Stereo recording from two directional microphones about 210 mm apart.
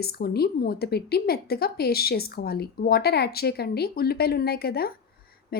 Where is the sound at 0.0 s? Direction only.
50° left (ahead or behind).